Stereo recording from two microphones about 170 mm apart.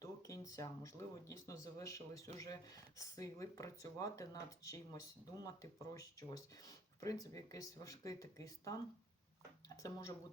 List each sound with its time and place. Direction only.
0.0 s speech: 20° left (ahead or behind)